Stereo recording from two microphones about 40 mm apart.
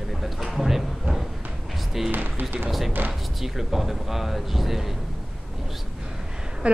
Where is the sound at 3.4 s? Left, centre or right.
Centre.